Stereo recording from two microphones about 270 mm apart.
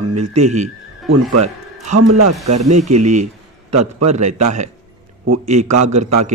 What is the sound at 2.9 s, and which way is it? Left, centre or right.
Speech, right.